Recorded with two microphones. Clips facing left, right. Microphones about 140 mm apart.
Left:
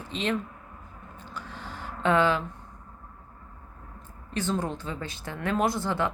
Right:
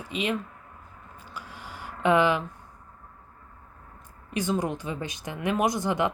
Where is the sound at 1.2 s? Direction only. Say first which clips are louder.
Left 2 dB; 10° right (ahead or behind).